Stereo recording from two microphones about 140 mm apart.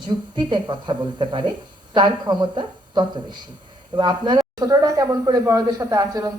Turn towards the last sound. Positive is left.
turn(degrees=-25)  # may be behind; listen again after turning